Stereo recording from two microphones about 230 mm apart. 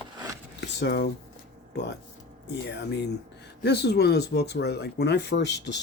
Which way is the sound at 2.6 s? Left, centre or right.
Left.